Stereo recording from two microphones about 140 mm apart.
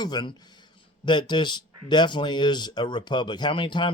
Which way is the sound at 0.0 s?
30° left (ahead or behind).